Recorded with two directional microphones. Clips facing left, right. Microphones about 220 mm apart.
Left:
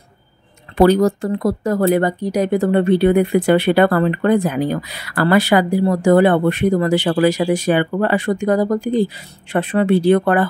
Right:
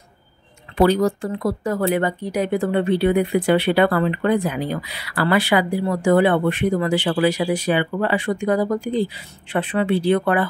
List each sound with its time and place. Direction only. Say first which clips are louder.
0.7 s speech: left 4 dB; 45° left (ahead or behind)